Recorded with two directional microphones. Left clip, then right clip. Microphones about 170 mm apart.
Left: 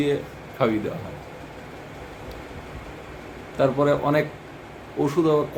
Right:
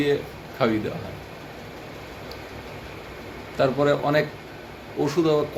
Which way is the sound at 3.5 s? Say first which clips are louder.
Left 1 dB; 15° left (ahead or behind).